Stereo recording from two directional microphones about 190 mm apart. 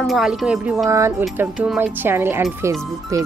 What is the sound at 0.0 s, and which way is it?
A woman's voice, centre (ahead or behind).